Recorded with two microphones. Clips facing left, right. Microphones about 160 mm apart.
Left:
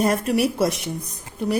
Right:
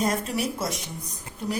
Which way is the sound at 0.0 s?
65° left (ahead or behind).